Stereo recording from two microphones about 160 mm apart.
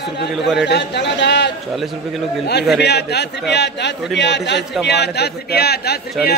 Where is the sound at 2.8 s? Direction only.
90° left.